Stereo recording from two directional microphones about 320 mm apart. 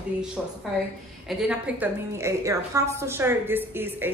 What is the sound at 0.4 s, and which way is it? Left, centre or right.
A woman's voice, centre.